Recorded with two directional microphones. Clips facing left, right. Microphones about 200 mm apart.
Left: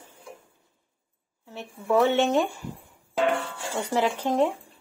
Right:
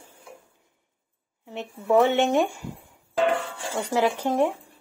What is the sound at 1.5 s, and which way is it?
A woman's voice, 15° right (ahead or behind).